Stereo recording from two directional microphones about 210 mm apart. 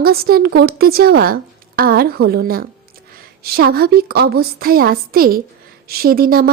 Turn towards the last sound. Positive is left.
turn(degrees=-45)  # may be behind; listen again after turning